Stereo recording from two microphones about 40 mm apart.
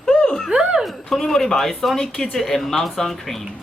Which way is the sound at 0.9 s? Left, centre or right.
Centre.